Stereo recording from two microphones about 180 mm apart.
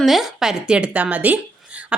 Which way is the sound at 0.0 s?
Centre (ahead or behind).